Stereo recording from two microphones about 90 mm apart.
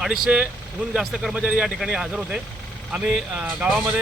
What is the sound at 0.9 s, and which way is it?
Speech, 5° right (ahead or behind).